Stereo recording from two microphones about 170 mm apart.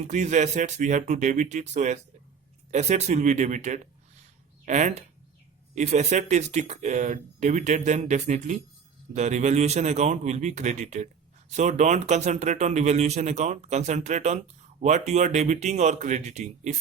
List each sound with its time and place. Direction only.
0.1 s speech: 45° right (ahead or behind)